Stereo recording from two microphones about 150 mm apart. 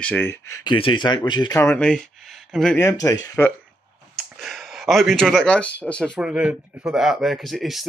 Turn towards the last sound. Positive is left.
turn(degrees=0)  # may be behind; listen again after turning